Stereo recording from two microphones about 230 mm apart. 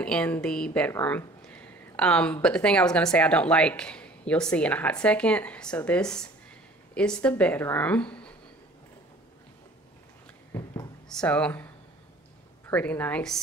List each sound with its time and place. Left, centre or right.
0.0 s speech: centre
10.5 s a sound: centre
11.1 s speech: centre
12.6 s a woman's voice: centre